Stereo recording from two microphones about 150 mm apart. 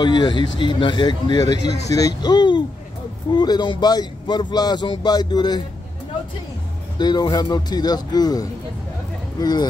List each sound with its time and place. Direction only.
0.0 s a man's voice: 30° left (ahead or behind)
7.0 s speech: 25° left (ahead or behind)